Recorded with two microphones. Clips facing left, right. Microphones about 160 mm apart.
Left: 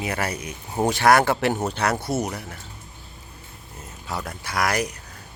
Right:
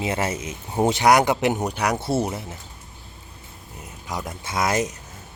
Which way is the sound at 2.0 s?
25° right (ahead or behind).